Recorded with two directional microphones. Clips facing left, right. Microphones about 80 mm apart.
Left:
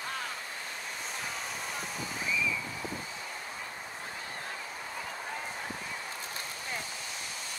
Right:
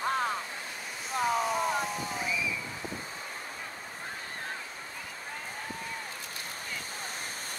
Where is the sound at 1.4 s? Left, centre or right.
Right.